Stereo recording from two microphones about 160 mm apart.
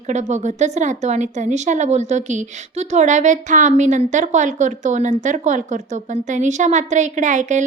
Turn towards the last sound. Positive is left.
turn(degrees=-50)  # may be behind; listen again after turning